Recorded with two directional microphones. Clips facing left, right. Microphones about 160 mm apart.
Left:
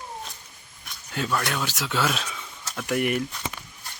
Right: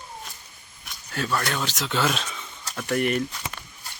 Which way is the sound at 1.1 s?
15° left (ahead or behind).